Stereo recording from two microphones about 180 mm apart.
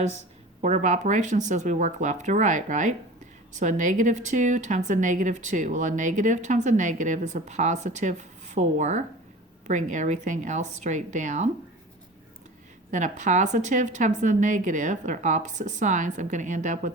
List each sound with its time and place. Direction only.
0.6 s speech: 40° right (ahead or behind)
12.9 s speech: 45° right (ahead or behind)